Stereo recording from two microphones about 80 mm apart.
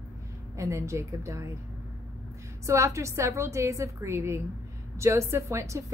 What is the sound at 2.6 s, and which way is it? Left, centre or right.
A woman's voice, right.